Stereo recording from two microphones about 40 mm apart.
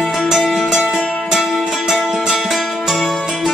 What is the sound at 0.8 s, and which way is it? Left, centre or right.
Music, centre.